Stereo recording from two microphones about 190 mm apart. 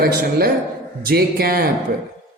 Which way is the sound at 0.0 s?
55° right (ahead or behind).